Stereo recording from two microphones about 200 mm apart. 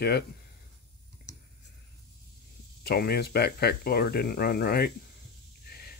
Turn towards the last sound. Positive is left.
turn(degrees=50)  # may be behind; listen again after turning